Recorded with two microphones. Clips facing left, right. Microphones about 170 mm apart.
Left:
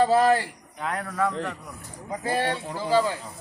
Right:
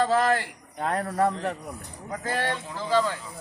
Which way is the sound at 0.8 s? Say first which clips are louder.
Right 3 dB; 40° right (ahead or behind).